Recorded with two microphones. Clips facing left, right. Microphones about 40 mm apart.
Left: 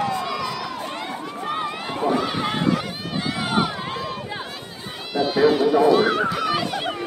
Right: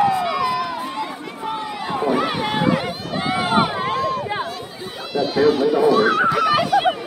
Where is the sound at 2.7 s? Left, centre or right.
Right.